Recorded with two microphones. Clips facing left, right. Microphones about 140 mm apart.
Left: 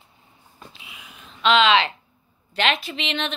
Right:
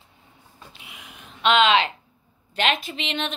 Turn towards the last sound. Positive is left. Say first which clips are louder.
# left 1 dB
turn(degrees=-45)  # may be behind; listen again after turning